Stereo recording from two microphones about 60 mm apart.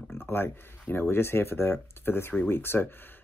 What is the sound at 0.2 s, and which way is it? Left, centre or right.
Speech, left.